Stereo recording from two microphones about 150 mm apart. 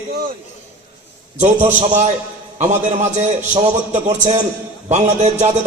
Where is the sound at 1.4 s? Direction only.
50° right (ahead or behind).